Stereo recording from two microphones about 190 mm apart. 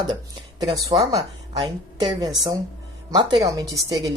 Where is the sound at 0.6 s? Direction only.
20° right (ahead or behind).